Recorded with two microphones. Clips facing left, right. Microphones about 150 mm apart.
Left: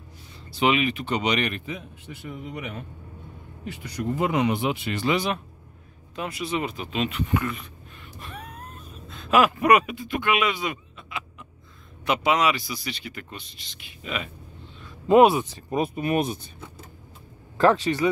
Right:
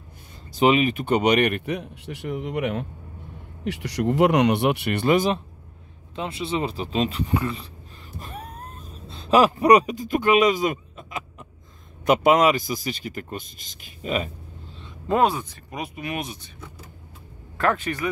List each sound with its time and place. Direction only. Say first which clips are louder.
0.5 s speech: right 4 dB; 40° right (ahead or behind)
6.1 s speech: right 2 dB; 25° right (ahead or behind)
8.2 s a sound: right 3 dB; 40° right (ahead or behind)
12.0 s a man's voice: right 5 dB; 45° right (ahead or behind)
15.1 s speech: left 5 dB; 15° left (ahead or behind)
15.7 s speech: left 7 dB; 30° left (ahead or behind)
17.6 s speech: left 4 dB; 30° left (ahead or behind)